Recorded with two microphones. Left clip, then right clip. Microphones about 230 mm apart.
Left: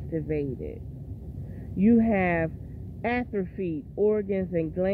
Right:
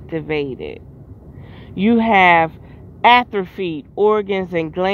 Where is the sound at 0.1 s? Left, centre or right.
Right.